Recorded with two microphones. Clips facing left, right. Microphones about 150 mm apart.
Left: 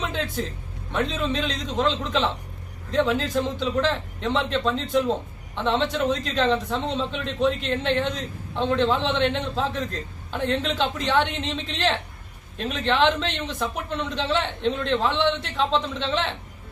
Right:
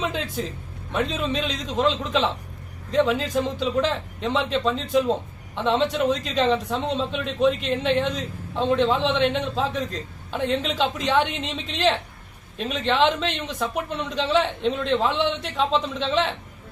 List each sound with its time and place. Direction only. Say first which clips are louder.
0.0 s a man's voice: right 1 dB; centre (ahead or behind)